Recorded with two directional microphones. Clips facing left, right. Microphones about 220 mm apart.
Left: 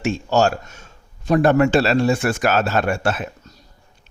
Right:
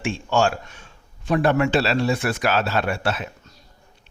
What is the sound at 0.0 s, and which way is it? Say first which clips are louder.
A man's voice: left 3 dB; 40° left (ahead or behind).